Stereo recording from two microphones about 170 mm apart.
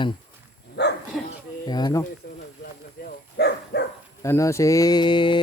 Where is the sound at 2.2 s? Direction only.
75° left (ahead or behind).